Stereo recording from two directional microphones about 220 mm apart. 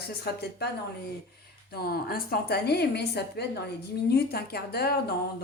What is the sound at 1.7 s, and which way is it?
A woman's voice, 45° left (ahead or behind).